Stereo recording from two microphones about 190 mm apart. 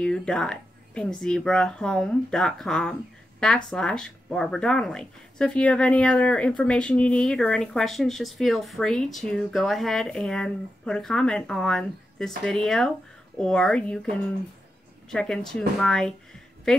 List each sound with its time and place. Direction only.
0.0 s speech: 5° left (ahead or behind)
15.0 s speech: 5° left (ahead or behind)